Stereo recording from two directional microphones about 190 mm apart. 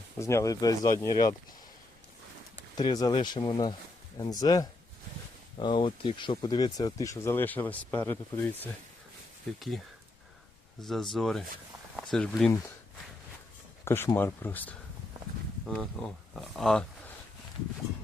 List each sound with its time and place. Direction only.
0.2 s speech: 15° left (ahead or behind)
2.7 s speech: 20° left (ahead or behind); by 12.5 s centre (ahead or behind)
13.8 s speech: 10° left (ahead or behind)